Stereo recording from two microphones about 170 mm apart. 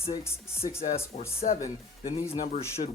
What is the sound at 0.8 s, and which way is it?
Speech, 35° left (ahead or behind).